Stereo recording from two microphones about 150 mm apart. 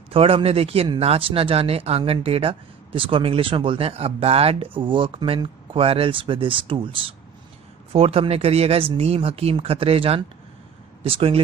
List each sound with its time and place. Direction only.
0.1 s speech: 40° right (ahead or behind)